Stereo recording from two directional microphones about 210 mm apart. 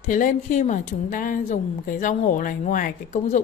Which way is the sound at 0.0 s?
35° left (ahead or behind).